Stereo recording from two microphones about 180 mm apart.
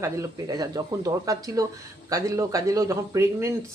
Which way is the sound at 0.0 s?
20° right (ahead or behind).